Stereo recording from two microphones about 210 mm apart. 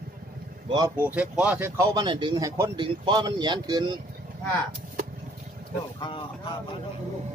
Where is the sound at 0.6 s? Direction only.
15° right (ahead or behind).